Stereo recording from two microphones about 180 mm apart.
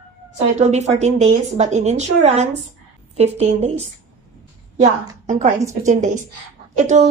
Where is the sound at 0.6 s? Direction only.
40° right (ahead or behind).